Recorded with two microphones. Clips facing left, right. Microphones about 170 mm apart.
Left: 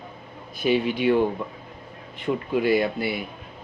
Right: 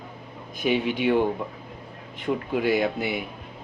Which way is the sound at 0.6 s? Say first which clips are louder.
Left 2 dB; 15° right (ahead or behind).